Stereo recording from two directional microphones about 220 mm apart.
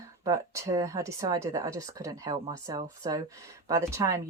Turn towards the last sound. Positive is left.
turn(degrees=-15)  # may be behind; listen again after turning